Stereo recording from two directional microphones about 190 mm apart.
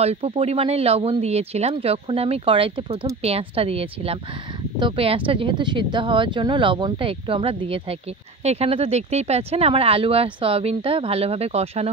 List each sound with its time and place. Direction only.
0.0 s speech: 35° right (ahead or behind)